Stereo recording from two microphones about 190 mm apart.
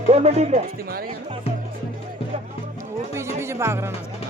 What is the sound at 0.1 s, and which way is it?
Speech, 35° right (ahead or behind).